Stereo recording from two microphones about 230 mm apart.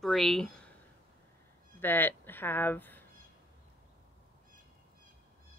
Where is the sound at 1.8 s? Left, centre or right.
Centre.